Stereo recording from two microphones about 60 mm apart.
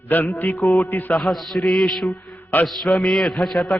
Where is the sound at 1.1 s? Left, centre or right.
Centre.